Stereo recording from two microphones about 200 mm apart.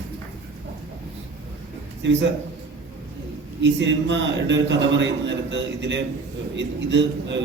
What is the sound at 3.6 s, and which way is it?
A man's voice, 65° right (ahead or behind).